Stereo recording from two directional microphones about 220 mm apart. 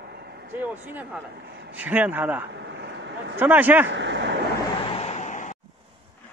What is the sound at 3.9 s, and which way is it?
Speech, 55° right (ahead or behind).